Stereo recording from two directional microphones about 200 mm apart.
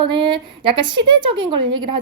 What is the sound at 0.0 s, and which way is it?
Speech, 25° right (ahead or behind).